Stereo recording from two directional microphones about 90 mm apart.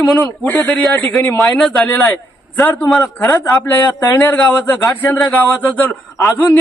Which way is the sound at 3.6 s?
20° left (ahead or behind).